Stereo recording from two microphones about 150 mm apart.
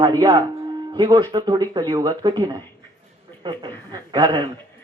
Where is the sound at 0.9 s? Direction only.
30° right (ahead or behind).